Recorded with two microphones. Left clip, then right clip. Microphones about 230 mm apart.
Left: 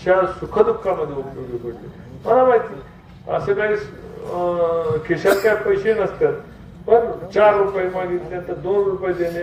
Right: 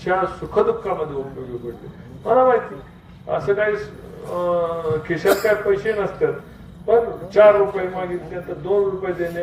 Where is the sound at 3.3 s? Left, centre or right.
Left.